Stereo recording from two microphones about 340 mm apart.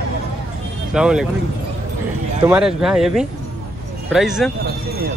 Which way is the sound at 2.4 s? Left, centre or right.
Centre.